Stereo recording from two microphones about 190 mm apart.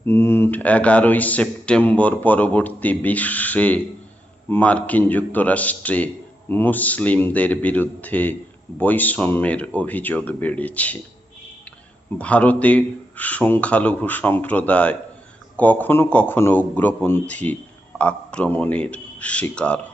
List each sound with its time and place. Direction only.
0.0 s speech: 10° left (ahead or behind)
12.1 s speech: 5° left (ahead or behind)